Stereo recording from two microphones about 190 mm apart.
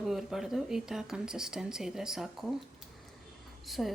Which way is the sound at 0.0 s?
Centre (ahead or behind).